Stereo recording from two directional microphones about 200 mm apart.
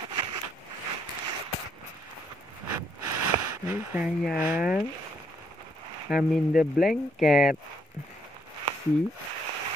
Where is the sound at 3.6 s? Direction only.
10° right (ahead or behind).